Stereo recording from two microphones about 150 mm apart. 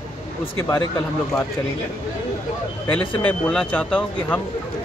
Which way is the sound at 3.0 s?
35° left (ahead or behind).